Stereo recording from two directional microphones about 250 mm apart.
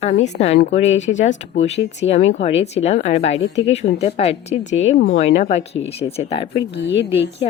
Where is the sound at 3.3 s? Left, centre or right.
Left.